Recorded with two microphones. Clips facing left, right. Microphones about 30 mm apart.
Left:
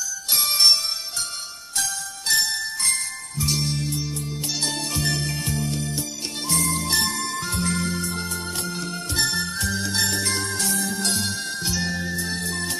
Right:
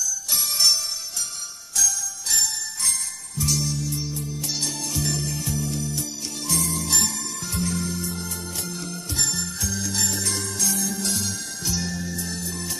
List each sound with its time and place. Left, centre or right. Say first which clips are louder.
0.3 s jingle bell: left 4 dB; left
1.8 s jingle bell: right 4 dB; left
3.3 s music: even; left
3.6 s music: left 1 dB; left
7.5 s music: right 1 dB; left